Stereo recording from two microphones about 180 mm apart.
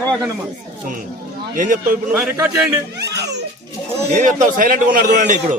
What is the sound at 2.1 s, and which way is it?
Speech, 10° right (ahead or behind).